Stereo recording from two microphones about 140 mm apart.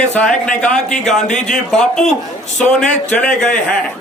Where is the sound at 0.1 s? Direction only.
10° left (ahead or behind).